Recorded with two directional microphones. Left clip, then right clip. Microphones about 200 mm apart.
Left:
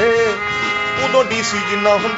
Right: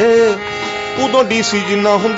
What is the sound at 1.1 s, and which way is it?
Music, 50° right (ahead or behind).